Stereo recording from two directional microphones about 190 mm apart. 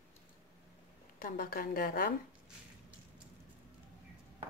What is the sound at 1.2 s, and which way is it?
Speech, 50° left (ahead or behind).